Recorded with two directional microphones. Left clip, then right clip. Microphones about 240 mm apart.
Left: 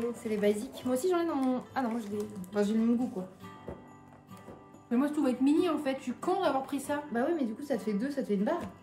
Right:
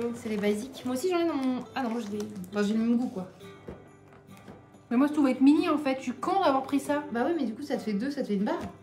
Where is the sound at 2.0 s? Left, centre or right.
Left.